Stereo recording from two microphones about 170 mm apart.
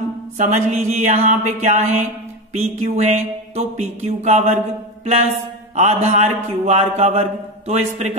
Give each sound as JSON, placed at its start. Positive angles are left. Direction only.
{"t": 0.4, "sound": "speech", "side_deg": -45}
{"t": 5.8, "sound": "speech", "side_deg": -40}